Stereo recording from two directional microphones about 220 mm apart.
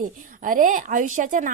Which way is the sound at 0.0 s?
40° right (ahead or behind).